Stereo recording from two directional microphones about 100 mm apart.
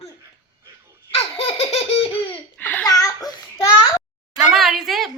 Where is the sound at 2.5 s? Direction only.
15° left (ahead or behind).